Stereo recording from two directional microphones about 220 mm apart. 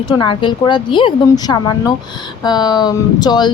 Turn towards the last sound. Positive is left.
turn(degrees=20)  # may be behind; listen again after turning